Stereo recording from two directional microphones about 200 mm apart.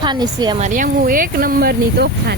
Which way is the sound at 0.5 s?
40° right (ahead or behind).